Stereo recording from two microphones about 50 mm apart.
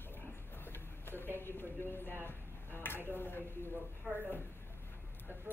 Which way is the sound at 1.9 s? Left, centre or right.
Left.